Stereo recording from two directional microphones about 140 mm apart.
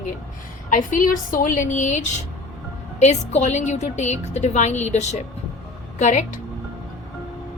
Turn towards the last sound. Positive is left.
turn(degrees=60)  # may be behind; listen again after turning